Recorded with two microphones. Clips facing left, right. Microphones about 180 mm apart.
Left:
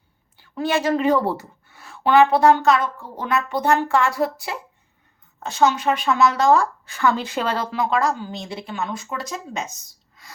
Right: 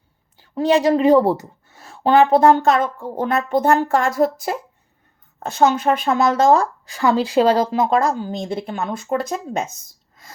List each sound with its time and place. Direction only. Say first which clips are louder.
0.3 s a woman's voice: right 6 dB; 35° right (ahead or behind)